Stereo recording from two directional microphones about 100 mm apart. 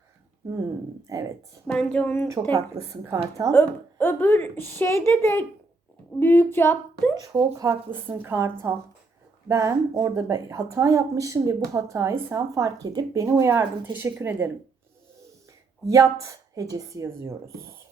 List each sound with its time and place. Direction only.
1.6 s a woman's voice: 10° left (ahead or behind)
2.2 s a woman's voice: 35° right (ahead or behind)
3.9 s speech: 20° left (ahead or behind)
7.3 s a woman's voice: 30° right (ahead or behind)
13.2 s a woman's voice: 30° right (ahead or behind)
15.9 s a woman's voice: 30° right (ahead or behind)